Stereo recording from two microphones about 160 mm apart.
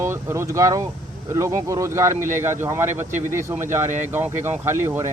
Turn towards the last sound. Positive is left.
turn(degrees=-15)  # may be behind; listen again after turning